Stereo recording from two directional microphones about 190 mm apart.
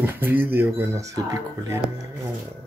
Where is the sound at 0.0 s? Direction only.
10° right (ahead or behind).